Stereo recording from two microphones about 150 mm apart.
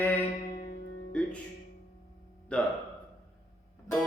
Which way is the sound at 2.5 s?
10° left (ahead or behind).